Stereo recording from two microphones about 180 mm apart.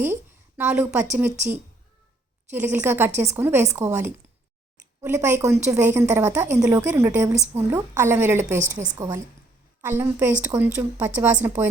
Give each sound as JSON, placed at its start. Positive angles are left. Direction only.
{"t": 0.0, "sound": "a sound", "side_deg": -10}
{"t": 1.2, "sound": "a woman's voice", "side_deg": -10}
{"t": 2.7, "sound": "a woman's voice", "side_deg": -10}